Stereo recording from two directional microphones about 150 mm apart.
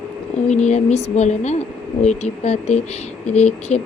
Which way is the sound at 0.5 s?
50° left (ahead or behind).